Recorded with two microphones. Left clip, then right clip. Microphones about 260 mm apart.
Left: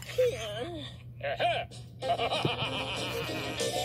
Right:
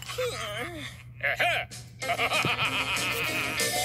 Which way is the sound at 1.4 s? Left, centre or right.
Right.